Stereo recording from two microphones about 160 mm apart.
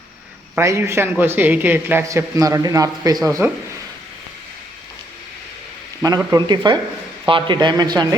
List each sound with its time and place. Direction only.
0.5 s a man's voice: 15° right (ahead or behind)
6.3 s speech: 25° right (ahead or behind)